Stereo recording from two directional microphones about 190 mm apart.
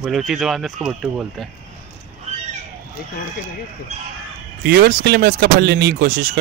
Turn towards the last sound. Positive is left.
turn(degrees=-50)  # may be behind; listen again after turning